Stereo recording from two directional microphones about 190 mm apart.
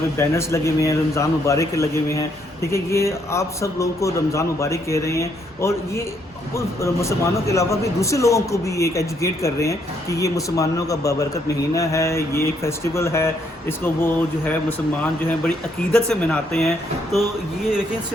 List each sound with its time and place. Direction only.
0.2 s a man's voice: 15° left (ahead or behind)
15.9 s speech: 5° left (ahead or behind)